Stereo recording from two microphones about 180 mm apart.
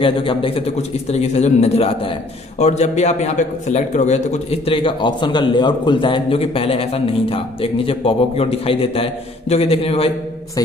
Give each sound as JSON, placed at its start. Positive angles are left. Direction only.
{"t": 0.0, "sound": "a man's voice", "side_deg": 30}